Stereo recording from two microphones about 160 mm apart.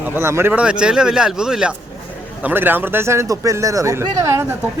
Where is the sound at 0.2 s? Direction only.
15° right (ahead or behind).